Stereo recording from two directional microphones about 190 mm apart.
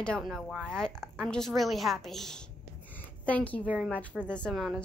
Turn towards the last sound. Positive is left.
turn(degrees=0)  # may be behind; listen again after turning